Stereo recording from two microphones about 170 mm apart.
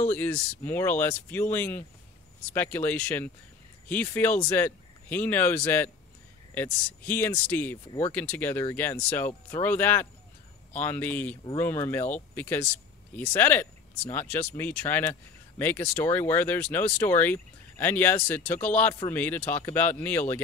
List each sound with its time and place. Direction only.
0.1 s speech: 10° left (ahead or behind)